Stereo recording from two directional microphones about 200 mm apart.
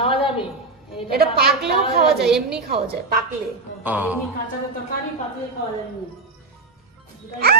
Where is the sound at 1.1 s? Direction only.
50° right (ahead or behind).